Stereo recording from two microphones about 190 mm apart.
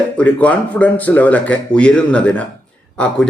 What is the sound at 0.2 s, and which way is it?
Speech, 5° left (ahead or behind).